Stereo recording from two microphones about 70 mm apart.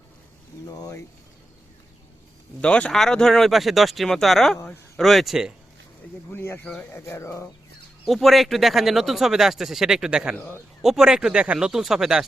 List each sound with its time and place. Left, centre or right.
2.6 s speech: centre
6.3 s speech: left
8.0 s speech: centre